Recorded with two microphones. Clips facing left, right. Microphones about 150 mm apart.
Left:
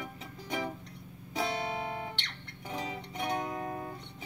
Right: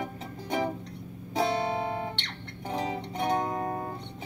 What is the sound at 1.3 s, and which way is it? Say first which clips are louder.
Music: right 6 dB; 35° right (ahead or behind).